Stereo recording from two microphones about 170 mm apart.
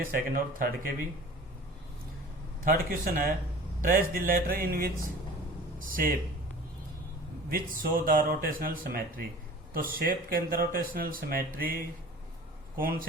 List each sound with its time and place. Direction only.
0.0 s speech: 55° right (ahead or behind)
2.6 s speech: 55° right (ahead or behind)
7.5 s speech: 55° right (ahead or behind)